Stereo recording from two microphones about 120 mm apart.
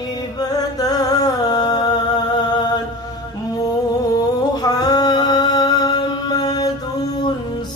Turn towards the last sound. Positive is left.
turn(degrees=35)  # may be behind; listen again after turning